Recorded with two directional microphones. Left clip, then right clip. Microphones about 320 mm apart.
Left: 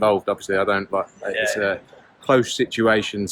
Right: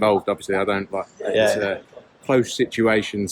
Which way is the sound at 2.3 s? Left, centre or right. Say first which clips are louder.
Left 1 dB; centre.